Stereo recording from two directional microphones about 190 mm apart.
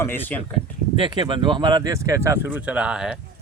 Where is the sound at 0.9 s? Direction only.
25° right (ahead or behind).